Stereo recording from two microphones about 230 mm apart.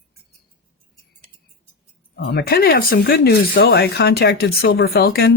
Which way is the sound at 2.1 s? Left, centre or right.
Left.